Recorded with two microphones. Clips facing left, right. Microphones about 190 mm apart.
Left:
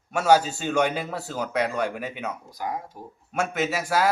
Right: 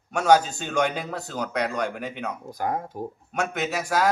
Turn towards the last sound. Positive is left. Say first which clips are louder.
# left 1 dB
turn(degrees=5)  # may be behind; listen again after turning